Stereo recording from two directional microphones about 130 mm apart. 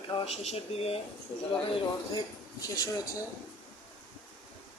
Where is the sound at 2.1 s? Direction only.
30° left (ahead or behind).